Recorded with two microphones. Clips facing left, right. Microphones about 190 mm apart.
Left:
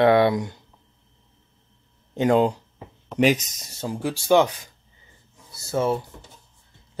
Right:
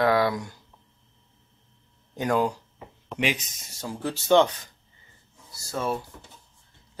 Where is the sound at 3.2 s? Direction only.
45° left (ahead or behind).